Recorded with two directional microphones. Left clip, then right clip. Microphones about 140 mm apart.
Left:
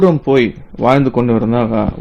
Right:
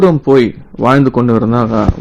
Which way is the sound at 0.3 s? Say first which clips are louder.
Right 3 dB; 10° left (ahead or behind).